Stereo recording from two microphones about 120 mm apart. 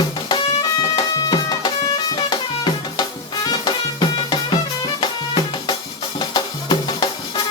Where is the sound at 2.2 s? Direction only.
40° left (ahead or behind).